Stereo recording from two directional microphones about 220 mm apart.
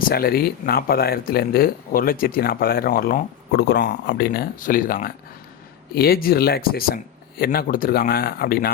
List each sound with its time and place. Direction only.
0.1 s speech: 45° left (ahead or behind)